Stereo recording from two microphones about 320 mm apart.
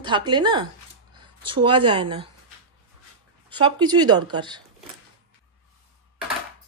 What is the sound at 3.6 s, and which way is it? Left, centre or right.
Speech, centre.